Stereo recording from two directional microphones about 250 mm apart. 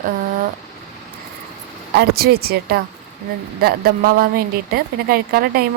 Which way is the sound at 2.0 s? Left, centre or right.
Right.